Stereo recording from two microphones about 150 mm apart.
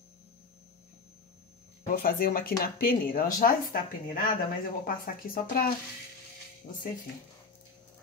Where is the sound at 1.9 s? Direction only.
75° left (ahead or behind).